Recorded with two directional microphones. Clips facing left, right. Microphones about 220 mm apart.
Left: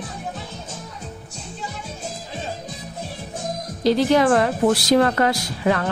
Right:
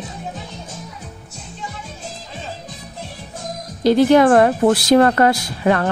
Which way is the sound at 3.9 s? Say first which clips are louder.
Right 5 dB; 55° right (ahead or behind).